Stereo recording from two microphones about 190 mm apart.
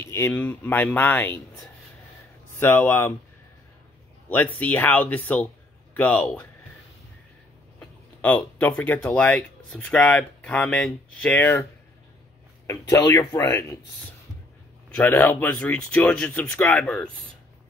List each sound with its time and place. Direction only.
0.0 s speech: 10° left (ahead or behind)
2.5 s speech: 10° left (ahead or behind)
4.3 s speech: 10° left (ahead or behind)
7.8 s speech: 5° left (ahead or behind)
12.6 s speech: 15° left (ahead or behind)
15.0 s speech: 10° left (ahead or behind)